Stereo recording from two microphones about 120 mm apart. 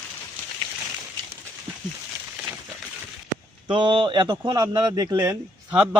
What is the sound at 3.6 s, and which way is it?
Speech, 45° right (ahead or behind).